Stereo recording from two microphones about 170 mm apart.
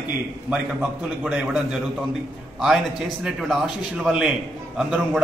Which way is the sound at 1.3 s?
5° right (ahead or behind).